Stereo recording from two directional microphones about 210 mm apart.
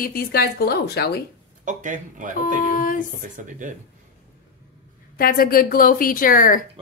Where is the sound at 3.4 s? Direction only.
35° right (ahead or behind).